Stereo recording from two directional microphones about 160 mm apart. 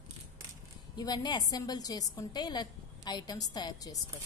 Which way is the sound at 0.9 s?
25° left (ahead or behind).